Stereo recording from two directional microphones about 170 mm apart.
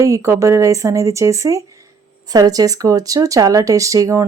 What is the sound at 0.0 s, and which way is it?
Speech, 15° right (ahead or behind).